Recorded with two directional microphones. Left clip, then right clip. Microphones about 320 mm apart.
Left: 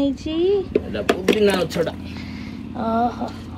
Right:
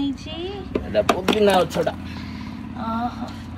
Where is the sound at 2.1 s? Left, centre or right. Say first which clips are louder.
Left 1 dB; centre.